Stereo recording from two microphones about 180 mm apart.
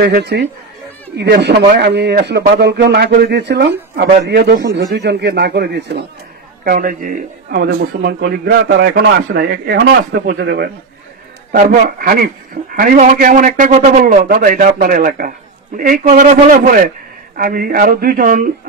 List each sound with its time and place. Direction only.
0.0 s a man's voice: 65° right (ahead or behind)
6.6 s a man's voice: 50° right (ahead or behind); by 10.7 s 65° right (ahead or behind)
11.5 s a man's voice: 55° right (ahead or behind)